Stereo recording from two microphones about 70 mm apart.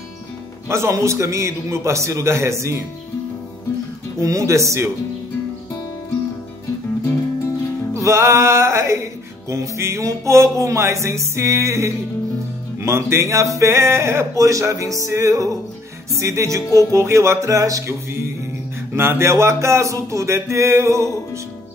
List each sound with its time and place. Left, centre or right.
0.7 s speech: right
4.2 s speech: right
7.9 s speech: right